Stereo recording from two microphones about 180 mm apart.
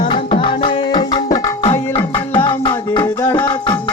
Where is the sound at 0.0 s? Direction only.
25° left (ahead or behind).